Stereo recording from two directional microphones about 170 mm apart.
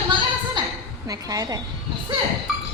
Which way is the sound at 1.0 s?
20° right (ahead or behind).